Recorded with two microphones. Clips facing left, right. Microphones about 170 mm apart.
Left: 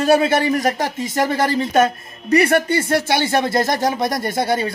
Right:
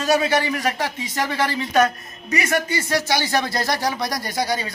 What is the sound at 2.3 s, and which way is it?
Speech, 60° left (ahead or behind).